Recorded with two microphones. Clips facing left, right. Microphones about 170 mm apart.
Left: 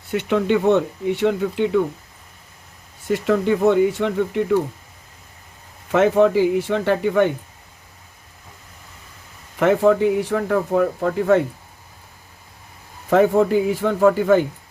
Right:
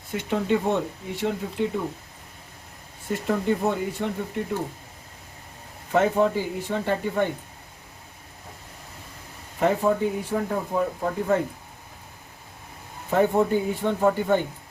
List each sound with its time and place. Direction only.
0.1 s speech: 75° left (ahead or behind)
3.1 s speech: 90° left
5.9 s speech: 85° left
9.6 s speech: 90° left
13.1 s speech: 90° left